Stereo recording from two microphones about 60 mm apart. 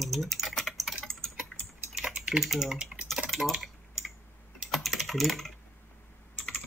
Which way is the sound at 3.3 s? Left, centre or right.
Centre.